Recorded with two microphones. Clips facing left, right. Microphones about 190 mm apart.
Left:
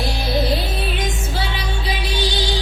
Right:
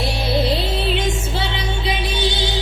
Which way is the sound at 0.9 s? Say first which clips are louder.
Right 3 dB; 25° right (ahead or behind).